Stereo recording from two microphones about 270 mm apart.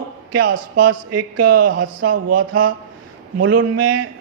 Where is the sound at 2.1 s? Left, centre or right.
Right.